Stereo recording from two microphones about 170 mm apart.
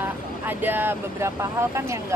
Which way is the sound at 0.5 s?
10° right (ahead or behind).